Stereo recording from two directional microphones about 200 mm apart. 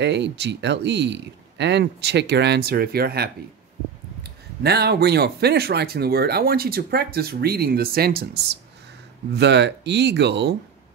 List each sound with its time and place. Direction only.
0.0 s speech: 60° right (ahead or behind)
9.3 s speech: 55° right (ahead or behind)